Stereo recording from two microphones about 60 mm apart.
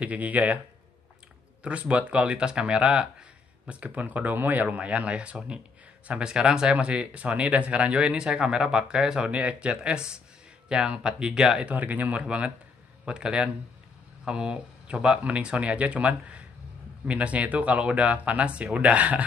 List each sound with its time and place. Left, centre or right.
0.0 s speech: right
1.6 s speech: centre
4.6 s speech: centre
11.7 s speech: right